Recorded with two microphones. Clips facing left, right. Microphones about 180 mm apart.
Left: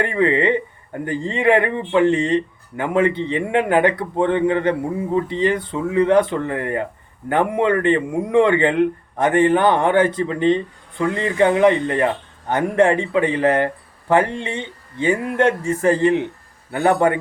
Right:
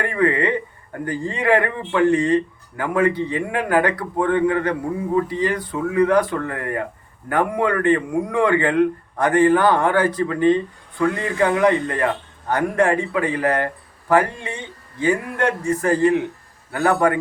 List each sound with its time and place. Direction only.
0.0 s speech: 25° left (ahead or behind)